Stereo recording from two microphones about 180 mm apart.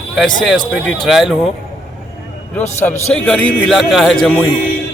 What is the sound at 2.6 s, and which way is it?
Speech, 40° left (ahead or behind).